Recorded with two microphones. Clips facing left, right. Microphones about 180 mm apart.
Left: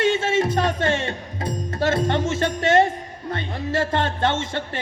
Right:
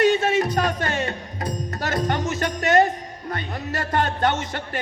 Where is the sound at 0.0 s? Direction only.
25° left (ahead or behind).